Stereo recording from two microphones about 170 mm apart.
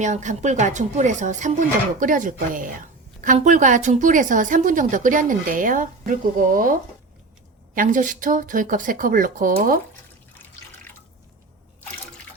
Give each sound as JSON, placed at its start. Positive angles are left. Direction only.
{"t": 0.0, "sound": "a woman's voice", "side_deg": -45}
{"t": 7.8, "sound": "a woman's voice", "side_deg": -50}
{"t": 10.9, "sound": "drip", "side_deg": 10}